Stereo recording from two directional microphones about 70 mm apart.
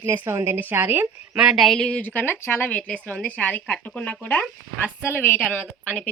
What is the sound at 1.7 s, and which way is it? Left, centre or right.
Speech, centre.